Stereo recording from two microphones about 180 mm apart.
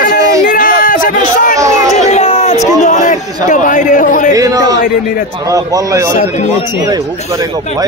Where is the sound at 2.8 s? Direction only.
45° left (ahead or behind).